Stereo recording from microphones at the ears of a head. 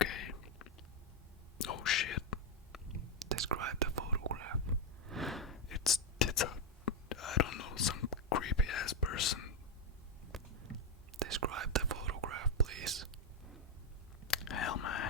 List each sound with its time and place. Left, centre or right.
0.0 s a sound: left
1.5 s whispering: left
3.0 s whispering: right
5.6 s whispering: left
11.2 s whispering: right
14.3 s whispering: left